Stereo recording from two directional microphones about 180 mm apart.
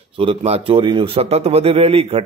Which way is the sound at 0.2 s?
35° right (ahead or behind).